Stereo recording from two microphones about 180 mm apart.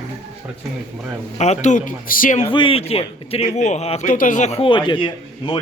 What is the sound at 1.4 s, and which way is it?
Speech, 40° left (ahead or behind).